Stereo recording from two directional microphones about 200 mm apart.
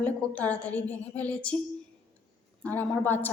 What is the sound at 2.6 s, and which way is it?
Speech, 10° left (ahead or behind).